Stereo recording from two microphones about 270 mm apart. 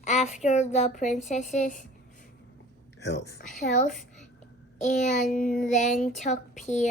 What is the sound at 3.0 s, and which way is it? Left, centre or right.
Speech, left.